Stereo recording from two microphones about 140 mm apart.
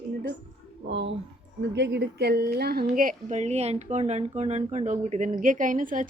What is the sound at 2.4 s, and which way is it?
A woman's voice, 90° right.